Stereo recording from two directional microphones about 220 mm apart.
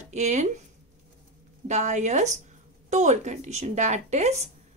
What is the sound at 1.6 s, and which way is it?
Speech, 30° right (ahead or behind).